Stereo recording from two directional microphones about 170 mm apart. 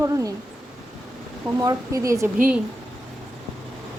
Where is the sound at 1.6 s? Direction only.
20° right (ahead or behind).